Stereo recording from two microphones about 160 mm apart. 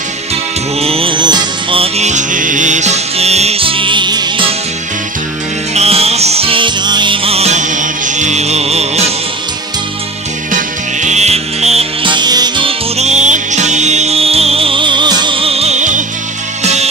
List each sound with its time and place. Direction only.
0.7 s music: 35° right (ahead or behind)
5.8 s music: 40° right (ahead or behind)
10.5 s music: 50° right (ahead or behind)